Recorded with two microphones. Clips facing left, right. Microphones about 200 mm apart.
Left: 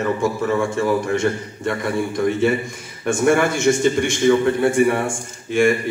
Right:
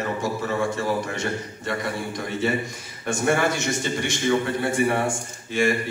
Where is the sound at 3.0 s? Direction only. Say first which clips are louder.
Left 5 dB; 55° left (ahead or behind).